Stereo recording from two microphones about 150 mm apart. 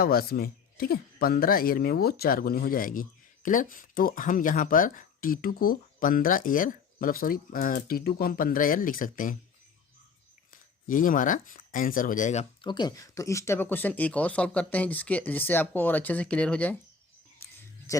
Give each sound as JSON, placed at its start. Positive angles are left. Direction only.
{"t": 0.0, "sound": "speech", "side_deg": 85}
{"t": 10.5, "sound": "speech", "side_deg": 65}
{"t": 12.6, "sound": "speech", "side_deg": 30}